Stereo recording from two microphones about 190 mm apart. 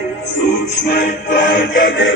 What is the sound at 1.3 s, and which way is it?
Music, 65° left (ahead or behind).